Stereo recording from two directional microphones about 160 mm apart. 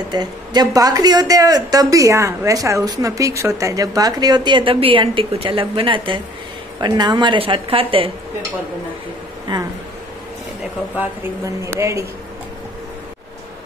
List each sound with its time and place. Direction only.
0.1 s a woman's voice: 25° right (ahead or behind)
9.5 s speech: 30° right (ahead or behind)
11.0 s speech: 15° right (ahead or behind)